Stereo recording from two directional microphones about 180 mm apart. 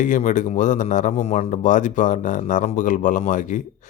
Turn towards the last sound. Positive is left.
turn(degrees=45)  # may be behind; listen again after turning